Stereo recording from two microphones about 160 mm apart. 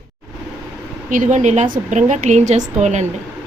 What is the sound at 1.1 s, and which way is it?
Speech, 50° right (ahead or behind).